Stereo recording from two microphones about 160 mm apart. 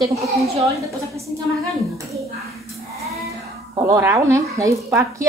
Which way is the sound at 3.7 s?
20° right (ahead or behind).